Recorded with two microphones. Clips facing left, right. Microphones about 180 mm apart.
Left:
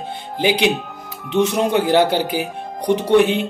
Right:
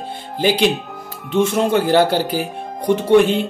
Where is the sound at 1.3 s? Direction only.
15° left (ahead or behind).